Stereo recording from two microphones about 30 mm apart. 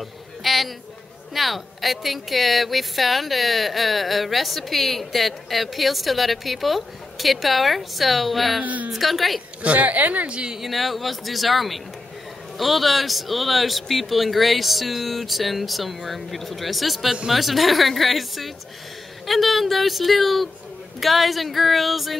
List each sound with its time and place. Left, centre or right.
0.4 s a sound: centre
1.3 s speech: centre
8.6 s a woman's voice: right
8.9 s speech: centre
9.6 s a woman's voice: right
10.2 s a woman's voice: right
10.6 s speech: centre